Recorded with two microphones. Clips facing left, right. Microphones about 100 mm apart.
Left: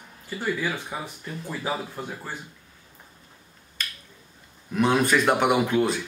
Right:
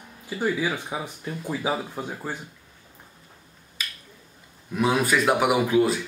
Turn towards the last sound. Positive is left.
turn(degrees=-5)  # may be behind; listen again after turning